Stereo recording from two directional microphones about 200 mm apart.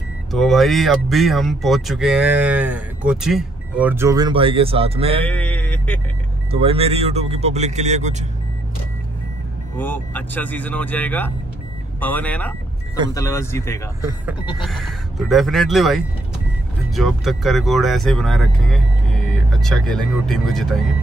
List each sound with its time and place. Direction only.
0.3 s speech: centre (ahead or behind); by 5.2 s 30° right (ahead or behind)
5.2 s music: 5° left (ahead or behind)
6.5 s speech: 30° right (ahead or behind)
9.8 s speech: 10° left (ahead or behind)
14.6 s speech: centre (ahead or behind)